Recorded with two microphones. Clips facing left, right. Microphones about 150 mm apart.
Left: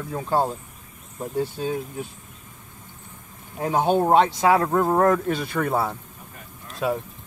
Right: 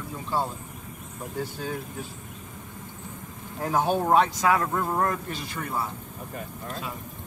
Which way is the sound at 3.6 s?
20° left (ahead or behind).